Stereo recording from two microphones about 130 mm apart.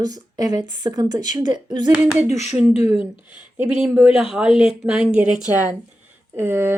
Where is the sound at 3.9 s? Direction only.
5° right (ahead or behind).